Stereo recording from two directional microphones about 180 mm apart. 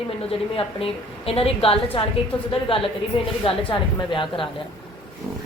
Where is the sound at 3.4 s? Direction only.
30° left (ahead or behind).